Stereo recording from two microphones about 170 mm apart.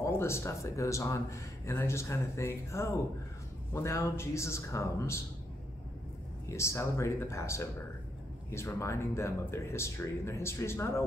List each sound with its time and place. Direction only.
0.0 s speech: 15° left (ahead or behind)
6.5 s speech: 15° left (ahead or behind)